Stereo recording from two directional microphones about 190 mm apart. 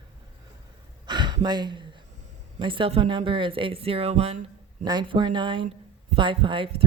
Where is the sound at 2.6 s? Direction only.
25° right (ahead or behind).